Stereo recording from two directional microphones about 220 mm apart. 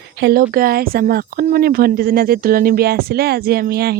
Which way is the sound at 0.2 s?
50° right (ahead or behind).